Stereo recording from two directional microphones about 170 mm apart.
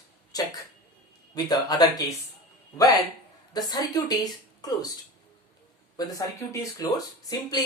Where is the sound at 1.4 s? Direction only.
25° left (ahead or behind).